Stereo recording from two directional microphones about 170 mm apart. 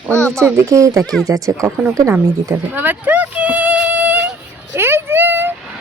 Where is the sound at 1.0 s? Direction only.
Centre (ahead or behind).